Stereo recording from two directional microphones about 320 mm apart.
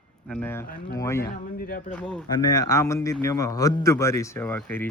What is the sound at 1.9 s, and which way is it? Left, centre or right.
A man's voice, centre.